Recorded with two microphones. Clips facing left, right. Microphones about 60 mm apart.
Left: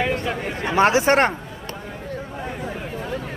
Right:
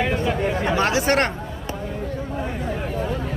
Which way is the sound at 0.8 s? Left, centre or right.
Left.